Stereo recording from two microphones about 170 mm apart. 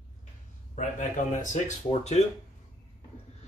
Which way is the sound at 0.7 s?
45° left (ahead or behind).